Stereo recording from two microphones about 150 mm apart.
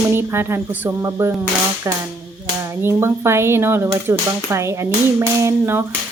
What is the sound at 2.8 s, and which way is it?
Speech, 15° right (ahead or behind).